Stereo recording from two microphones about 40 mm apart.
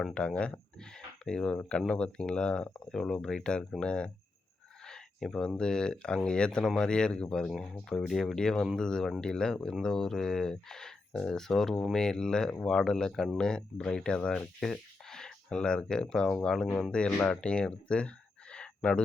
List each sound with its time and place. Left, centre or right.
0.1 s speech: left
2.9 s speech: centre
4.9 s speech: centre
14.6 s a sound: centre
15.2 s speech: left
18.5 s a sound: left